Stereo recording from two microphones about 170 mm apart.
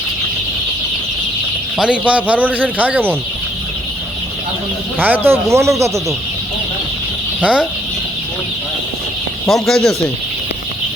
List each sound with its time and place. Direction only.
1.8 s speech: 5° right (ahead or behind)
4.9 s speech: 10° right (ahead or behind)
7.4 s speech: 5° right (ahead or behind)
9.5 s speech: centre (ahead or behind)